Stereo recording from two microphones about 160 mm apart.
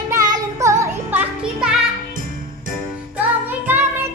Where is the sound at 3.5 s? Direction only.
10° right (ahead or behind).